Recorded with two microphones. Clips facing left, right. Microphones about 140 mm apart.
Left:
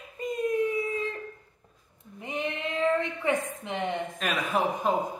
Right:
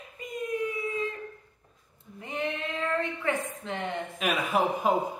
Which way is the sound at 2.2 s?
15° left (ahead or behind).